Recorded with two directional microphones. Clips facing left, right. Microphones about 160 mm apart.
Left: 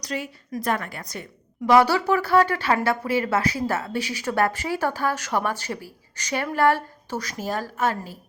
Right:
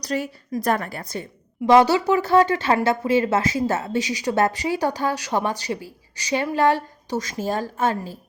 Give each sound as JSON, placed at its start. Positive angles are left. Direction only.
{"t": 0.0, "sound": "a woman's voice", "side_deg": -40}